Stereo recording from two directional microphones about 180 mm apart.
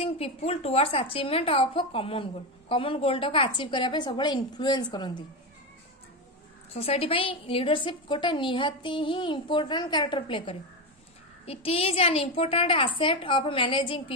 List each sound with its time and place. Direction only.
0.0 s a woman's voice: 35° left (ahead or behind)
6.7 s a woman's voice: 35° left (ahead or behind)